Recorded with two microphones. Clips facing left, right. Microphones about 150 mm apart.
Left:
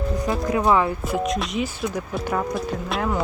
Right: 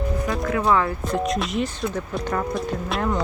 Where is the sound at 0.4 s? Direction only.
20° left (ahead or behind).